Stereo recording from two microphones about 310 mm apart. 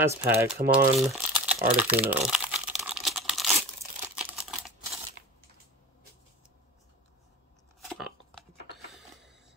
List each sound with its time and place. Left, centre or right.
0.2 s speech: centre
1.8 s crumpling: centre
3.8 s crumpling: centre
7.9 s a sound: centre